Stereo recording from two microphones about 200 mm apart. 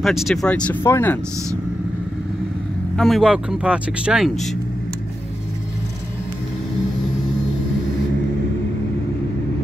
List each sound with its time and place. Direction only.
0.0 s speech: centre (ahead or behind)
3.0 s speech: centre (ahead or behind)